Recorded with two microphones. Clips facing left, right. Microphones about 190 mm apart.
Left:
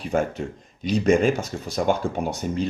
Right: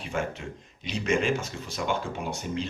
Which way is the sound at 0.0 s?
40° left (ahead or behind).